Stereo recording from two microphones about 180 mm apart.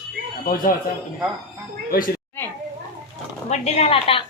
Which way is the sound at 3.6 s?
35° left (ahead or behind).